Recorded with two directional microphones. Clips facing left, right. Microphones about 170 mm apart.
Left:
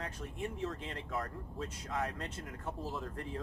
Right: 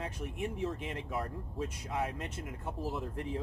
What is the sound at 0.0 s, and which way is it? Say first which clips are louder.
Speech: right 3 dB; 20° right (ahead or behind).